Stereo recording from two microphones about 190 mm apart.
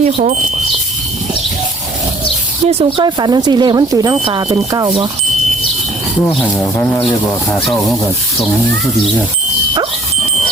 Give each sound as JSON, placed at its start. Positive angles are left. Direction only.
{"t": 0.0, "sound": "speech", "side_deg": -40}
{"t": 2.6, "sound": "speech", "side_deg": -25}
{"t": 6.2, "sound": "speech", "side_deg": 10}